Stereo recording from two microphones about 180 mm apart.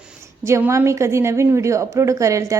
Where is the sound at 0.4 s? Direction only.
15° right (ahead or behind).